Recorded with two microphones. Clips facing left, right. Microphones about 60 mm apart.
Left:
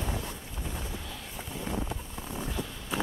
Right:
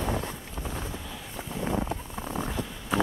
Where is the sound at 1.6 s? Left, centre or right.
Right.